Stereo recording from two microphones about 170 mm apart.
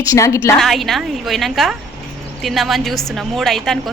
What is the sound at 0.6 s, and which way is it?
A woman's voice, centre (ahead or behind).